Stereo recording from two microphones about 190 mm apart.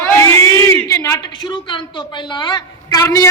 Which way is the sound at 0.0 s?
10° left (ahead or behind).